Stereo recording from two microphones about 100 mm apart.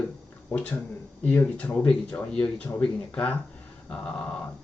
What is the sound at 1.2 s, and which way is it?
Speech, 15° left (ahead or behind).